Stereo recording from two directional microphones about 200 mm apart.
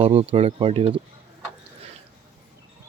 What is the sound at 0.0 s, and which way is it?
Speech, 25° right (ahead or behind).